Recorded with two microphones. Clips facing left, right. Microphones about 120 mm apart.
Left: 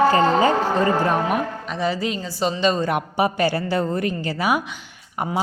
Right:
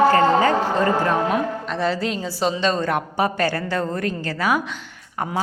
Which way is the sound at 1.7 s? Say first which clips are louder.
Even; 5° left (ahead or behind).